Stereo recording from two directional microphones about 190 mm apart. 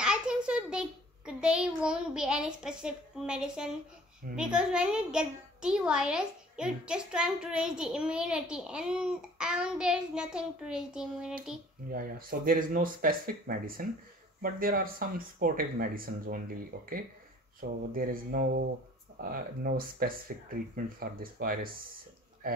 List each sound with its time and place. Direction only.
0.0 s a child's voice: 5° right (ahead or behind)
11.9 s speech: 50° right (ahead or behind)
17.6 s speech: 50° right (ahead or behind)